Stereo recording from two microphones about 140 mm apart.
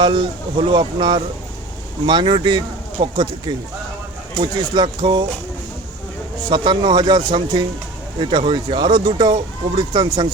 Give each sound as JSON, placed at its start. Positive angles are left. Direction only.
{"t": 0.0, "sound": "speech", "side_deg": -35}
{"t": 6.5, "sound": "speech", "side_deg": -30}